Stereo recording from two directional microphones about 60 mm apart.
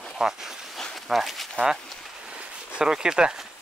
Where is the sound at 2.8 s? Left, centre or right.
Centre.